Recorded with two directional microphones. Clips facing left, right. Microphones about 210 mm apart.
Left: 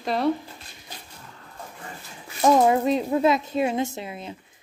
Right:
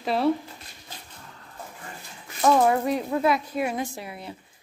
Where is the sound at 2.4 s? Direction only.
20° left (ahead or behind).